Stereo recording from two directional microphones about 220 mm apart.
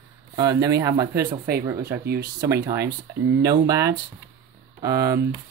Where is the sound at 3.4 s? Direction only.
15° right (ahead or behind).